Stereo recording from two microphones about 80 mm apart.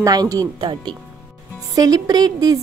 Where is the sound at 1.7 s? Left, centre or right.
Right.